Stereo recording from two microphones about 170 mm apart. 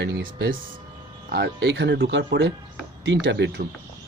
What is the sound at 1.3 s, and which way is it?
Speech, 80° right.